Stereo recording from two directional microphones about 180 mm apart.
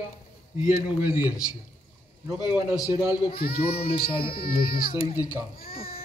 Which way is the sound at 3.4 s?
60° left (ahead or behind).